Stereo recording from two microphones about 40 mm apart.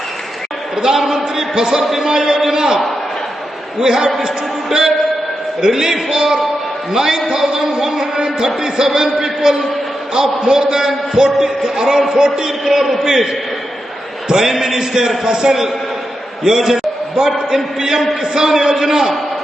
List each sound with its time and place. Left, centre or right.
0.8 s a man's voice: centre
12.6 s a man's voice: centre
14.3 s a man's voice: centre